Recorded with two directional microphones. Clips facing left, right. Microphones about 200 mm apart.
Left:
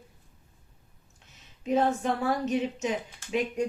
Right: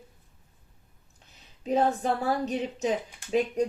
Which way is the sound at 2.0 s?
35° right (ahead or behind).